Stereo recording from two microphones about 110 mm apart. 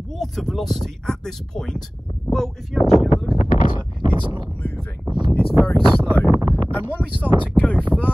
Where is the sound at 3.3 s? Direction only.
40° right (ahead or behind).